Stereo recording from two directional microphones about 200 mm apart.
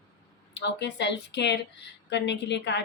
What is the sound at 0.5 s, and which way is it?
Speech, 60° left (ahead or behind).